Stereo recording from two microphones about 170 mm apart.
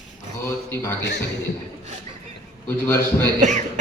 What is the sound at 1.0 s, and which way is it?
Speech, 85° left.